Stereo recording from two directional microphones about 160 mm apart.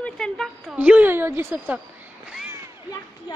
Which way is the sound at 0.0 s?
5° left (ahead or behind).